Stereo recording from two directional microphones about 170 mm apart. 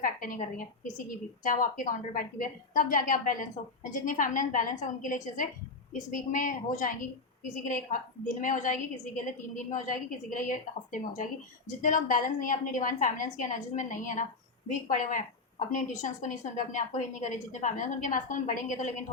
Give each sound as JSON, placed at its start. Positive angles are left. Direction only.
{"t": 0.0, "sound": "a woman's voice", "side_deg": 55}